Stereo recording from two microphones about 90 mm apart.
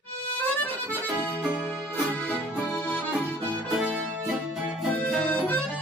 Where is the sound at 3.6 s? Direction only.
5° right (ahead or behind).